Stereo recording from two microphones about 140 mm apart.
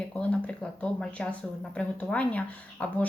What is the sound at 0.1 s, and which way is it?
A woman's voice, 10° left (ahead or behind).